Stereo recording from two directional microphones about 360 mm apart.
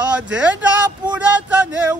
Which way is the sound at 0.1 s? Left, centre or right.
Centre.